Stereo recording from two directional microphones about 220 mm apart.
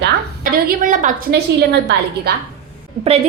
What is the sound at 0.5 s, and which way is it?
A woman's voice, 40° right (ahead or behind).